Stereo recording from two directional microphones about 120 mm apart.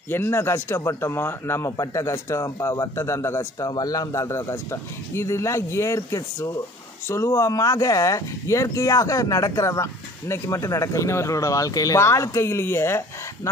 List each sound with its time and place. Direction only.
0.1 s speech: 20° left (ahead or behind)
3.6 s speech: 35° left (ahead or behind)